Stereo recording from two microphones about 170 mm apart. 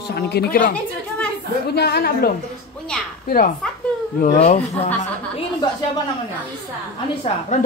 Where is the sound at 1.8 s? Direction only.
75° left (ahead or behind).